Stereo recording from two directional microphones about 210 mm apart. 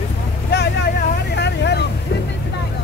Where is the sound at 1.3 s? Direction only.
55° left (ahead or behind).